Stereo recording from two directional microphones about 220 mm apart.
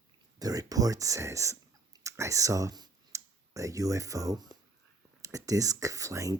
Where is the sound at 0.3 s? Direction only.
15° right (ahead or behind).